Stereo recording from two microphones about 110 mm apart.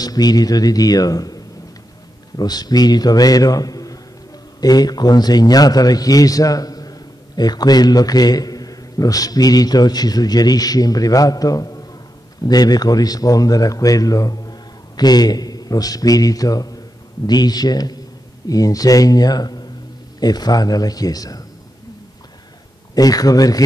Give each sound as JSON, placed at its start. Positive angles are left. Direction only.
{"t": 0.0, "sound": "a man's voice", "side_deg": 35}
{"t": 22.9, "sound": "a man's voice", "side_deg": 35}